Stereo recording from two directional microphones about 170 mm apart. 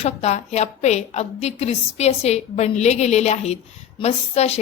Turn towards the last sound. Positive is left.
turn(degrees=40)  # may be behind; listen again after turning